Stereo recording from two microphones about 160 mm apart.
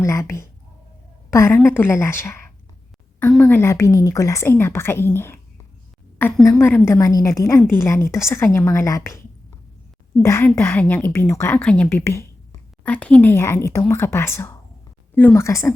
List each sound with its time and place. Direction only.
0.0 s a woman's voice: 20° left (ahead or behind)
6.6 s a woman's voice: 15° left (ahead or behind)
10.2 s a woman's voice: 15° left (ahead or behind)